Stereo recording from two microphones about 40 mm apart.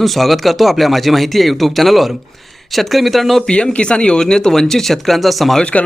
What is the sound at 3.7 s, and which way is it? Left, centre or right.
Speech, left.